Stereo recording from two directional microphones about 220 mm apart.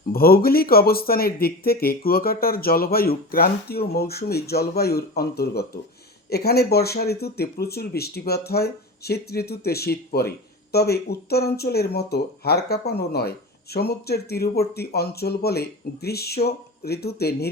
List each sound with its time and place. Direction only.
0.1 s speech: 45° left (ahead or behind)